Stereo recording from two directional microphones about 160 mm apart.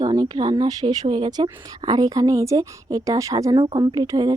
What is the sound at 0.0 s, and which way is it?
Speech, 25° right (ahead or behind).